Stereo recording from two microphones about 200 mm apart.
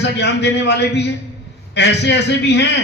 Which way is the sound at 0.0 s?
60° left (ahead or behind).